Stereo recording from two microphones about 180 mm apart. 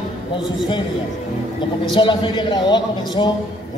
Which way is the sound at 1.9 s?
25° left (ahead or behind).